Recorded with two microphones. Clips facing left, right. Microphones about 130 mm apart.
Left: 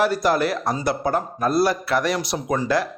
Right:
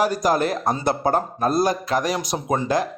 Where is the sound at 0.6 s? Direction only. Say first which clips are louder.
Right 1 dB; 25° right (ahead or behind).